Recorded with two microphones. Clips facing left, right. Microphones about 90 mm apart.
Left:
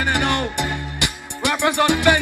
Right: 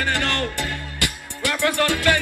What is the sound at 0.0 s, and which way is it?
Music, 15° left (ahead or behind).